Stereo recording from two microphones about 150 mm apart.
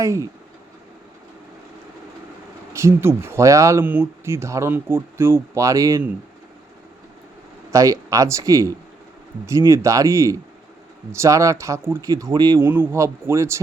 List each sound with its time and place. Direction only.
0.0 s speech: 20° right (ahead or behind)
2.7 s speech: 15° right (ahead or behind)
7.7 s speech: 20° right (ahead or behind)
12.6 s speech: 15° right (ahead or behind)